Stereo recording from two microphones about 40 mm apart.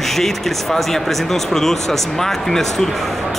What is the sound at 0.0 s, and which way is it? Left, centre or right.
Speech, centre.